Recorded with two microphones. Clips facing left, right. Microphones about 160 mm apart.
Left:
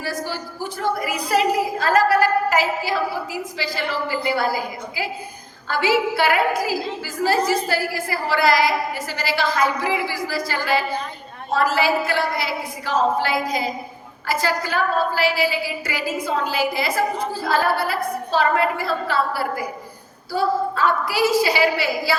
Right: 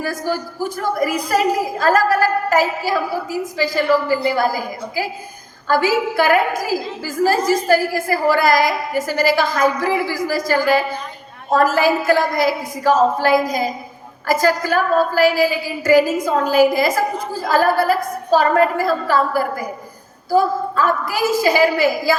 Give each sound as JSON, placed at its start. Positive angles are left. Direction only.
{"t": 0.0, "sound": "a woman's voice", "side_deg": -45}